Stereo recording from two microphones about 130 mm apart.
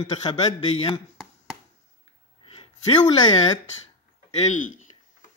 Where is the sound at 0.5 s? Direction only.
50° left (ahead or behind).